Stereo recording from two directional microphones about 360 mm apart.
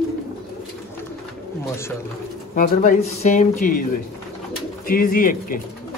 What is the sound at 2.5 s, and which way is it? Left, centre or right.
Speech, left.